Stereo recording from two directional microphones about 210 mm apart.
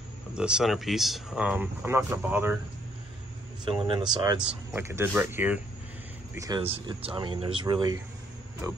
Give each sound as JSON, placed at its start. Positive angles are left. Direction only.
{"t": 0.4, "sound": "speech", "side_deg": -5}
{"t": 3.6, "sound": "speech", "side_deg": -20}
{"t": 6.6, "sound": "speech", "side_deg": -25}